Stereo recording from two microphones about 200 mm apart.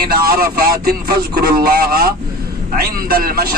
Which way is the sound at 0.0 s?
50° right (ahead or behind).